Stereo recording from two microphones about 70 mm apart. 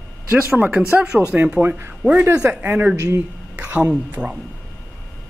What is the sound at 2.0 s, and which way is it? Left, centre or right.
A woman's voice, centre.